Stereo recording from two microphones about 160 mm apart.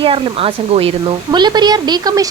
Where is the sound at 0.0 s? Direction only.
35° right (ahead or behind).